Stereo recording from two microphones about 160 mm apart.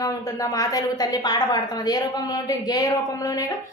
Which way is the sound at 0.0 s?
20° left (ahead or behind).